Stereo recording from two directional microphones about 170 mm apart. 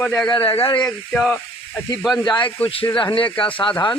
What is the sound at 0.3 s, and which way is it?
Speech, 30° left (ahead or behind).